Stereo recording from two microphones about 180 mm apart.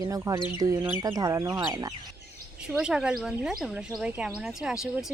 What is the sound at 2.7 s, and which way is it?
Speech, 5° right (ahead or behind).